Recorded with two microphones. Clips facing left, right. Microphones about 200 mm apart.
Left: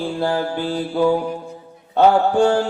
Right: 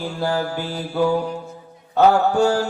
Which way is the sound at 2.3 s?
40° right (ahead or behind).